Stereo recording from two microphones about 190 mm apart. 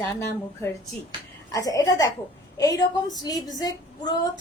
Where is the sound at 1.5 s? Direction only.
20° left (ahead or behind).